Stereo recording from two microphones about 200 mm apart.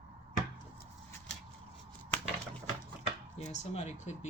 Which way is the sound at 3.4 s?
35° left (ahead or behind).